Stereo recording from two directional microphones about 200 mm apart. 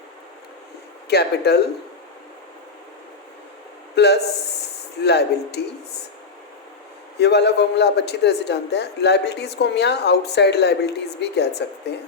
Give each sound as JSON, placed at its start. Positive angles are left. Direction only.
{"t": 1.0, "sound": "a man's voice", "side_deg": 55}
{"t": 3.9, "sound": "a man's voice", "side_deg": 55}
{"t": 7.2, "sound": "a man's voice", "side_deg": 55}